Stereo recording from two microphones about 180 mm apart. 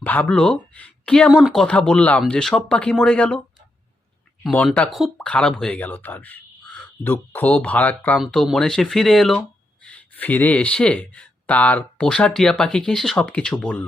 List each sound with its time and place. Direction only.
0.0 s speech: 10° left (ahead or behind)
4.4 s speech: 5° left (ahead or behind)